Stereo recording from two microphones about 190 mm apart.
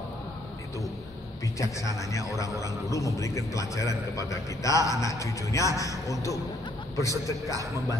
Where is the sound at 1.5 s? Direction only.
15° left (ahead or behind).